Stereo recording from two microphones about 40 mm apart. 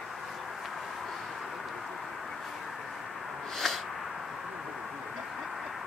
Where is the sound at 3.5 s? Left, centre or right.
Centre.